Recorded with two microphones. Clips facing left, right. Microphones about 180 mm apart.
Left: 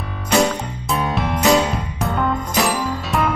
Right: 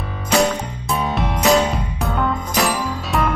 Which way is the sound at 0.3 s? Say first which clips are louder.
Even; centre (ahead or behind).